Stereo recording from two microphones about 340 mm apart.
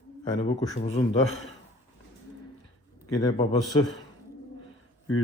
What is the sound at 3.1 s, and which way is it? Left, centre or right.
Speech, centre.